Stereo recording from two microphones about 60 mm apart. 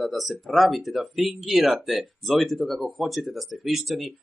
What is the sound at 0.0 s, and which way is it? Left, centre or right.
Speech, centre.